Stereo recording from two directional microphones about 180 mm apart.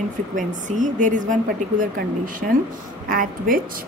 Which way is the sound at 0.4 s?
45° right (ahead or behind).